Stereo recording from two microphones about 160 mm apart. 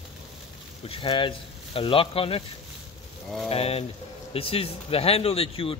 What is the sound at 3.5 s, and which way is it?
Speech, 40° left (ahead or behind).